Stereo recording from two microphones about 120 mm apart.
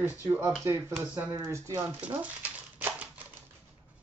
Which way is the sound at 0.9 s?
10° right (ahead or behind).